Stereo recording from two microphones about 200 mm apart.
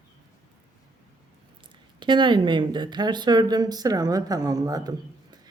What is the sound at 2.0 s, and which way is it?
Speech, 25° right (ahead or behind).